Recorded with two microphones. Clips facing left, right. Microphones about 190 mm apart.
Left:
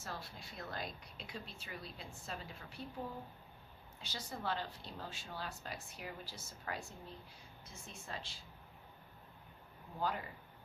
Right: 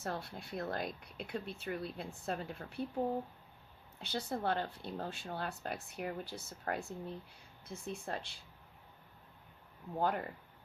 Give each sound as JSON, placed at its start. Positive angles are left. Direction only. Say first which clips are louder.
{"t": 0.0, "sound": "speech", "louder": "right 7 dB", "side_deg": -60}
{"t": 4.0, "sound": "speech", "louder": "right 7 dB", "side_deg": -60}
{"t": 10.0, "sound": "speech", "louder": "right 5 dB", "side_deg": -55}